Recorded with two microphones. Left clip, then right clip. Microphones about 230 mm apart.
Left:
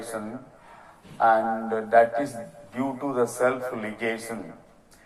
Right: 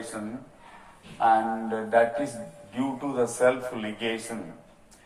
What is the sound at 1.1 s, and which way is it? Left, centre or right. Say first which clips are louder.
Speech: left 2 dB; left.